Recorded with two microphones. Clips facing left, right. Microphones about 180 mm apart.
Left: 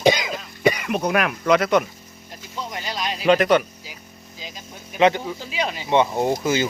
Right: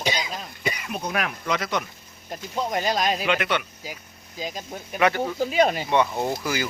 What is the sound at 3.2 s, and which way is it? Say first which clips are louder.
Speech: left 8 dB; 40° left (ahead or behind).